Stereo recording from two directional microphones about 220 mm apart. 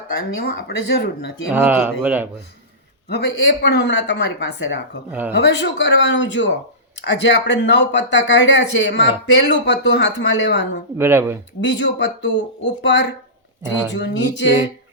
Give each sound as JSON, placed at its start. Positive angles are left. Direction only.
{"t": 0.1, "sound": "speech", "side_deg": 45}
{"t": 1.5, "sound": "speech", "side_deg": -5}
{"t": 3.1, "sound": "speech", "side_deg": 50}
{"t": 10.9, "sound": "speech", "side_deg": -10}
{"t": 11.6, "sound": "speech", "side_deg": 55}